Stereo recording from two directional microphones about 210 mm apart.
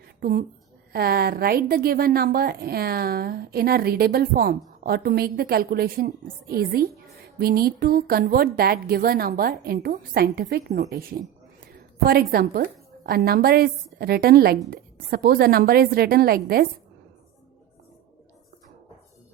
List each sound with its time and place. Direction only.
0.2 s a woman's voice: 45° right (ahead or behind)